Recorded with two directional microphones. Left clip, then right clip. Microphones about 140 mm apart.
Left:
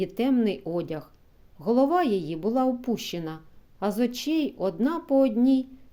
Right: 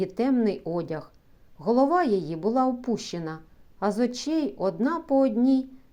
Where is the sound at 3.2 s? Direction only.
15° left (ahead or behind).